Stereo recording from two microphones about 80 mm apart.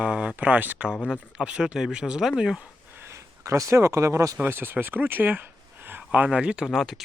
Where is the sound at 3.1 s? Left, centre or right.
Right.